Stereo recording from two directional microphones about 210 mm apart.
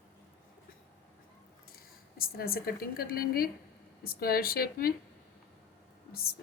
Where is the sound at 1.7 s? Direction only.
45° left (ahead or behind).